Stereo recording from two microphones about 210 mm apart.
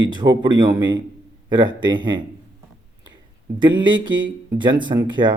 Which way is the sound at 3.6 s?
20° right (ahead or behind).